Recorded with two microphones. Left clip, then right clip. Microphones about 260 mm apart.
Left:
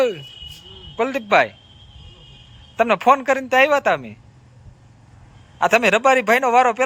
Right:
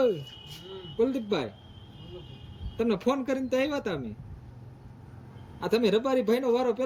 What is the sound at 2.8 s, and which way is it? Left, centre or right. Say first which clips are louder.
A man's voice: left 13 dB; centre.